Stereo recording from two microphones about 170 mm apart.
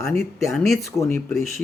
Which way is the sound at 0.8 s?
20° left (ahead or behind).